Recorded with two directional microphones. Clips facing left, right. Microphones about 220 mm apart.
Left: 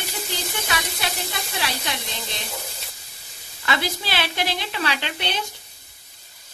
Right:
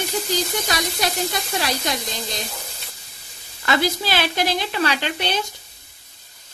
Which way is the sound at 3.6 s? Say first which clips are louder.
Right 5 dB; 45° right (ahead or behind).